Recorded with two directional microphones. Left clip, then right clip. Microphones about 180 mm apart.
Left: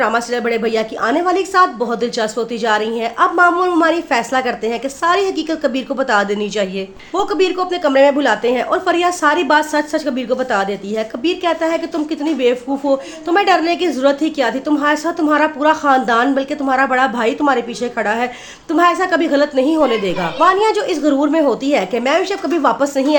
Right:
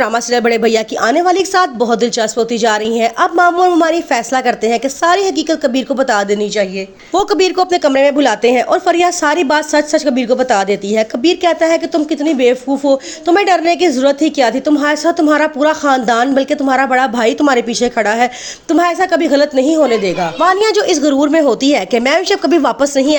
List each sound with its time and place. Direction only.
0.0 s speech: 40° right (ahead or behind); by 6.5 s 25° right (ahead or behind)
7.1 s a woman's voice: 40° right (ahead or behind); by 20.3 s 15° right (ahead or behind)
20.4 s speech: 35° right (ahead or behind)